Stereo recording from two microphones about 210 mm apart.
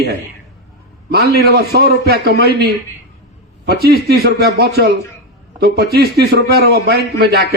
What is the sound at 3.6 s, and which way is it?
A man's voice, 50° right (ahead or behind).